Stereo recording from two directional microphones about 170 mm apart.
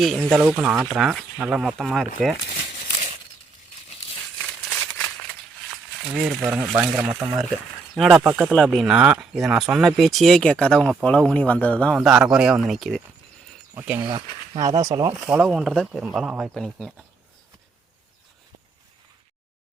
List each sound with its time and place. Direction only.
0.3 s speech: 10° right (ahead or behind)
4.7 s a sound: 5° left (ahead or behind)
6.1 s speech: 5° right (ahead or behind)
7.9 s speech: centre (ahead or behind)
13.7 s speech: 15° right (ahead or behind)
14.0 s speech: 30° right (ahead or behind)
15.3 s speech: 5° right (ahead or behind)